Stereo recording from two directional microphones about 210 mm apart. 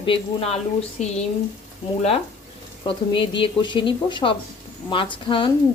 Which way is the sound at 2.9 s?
25° left (ahead or behind).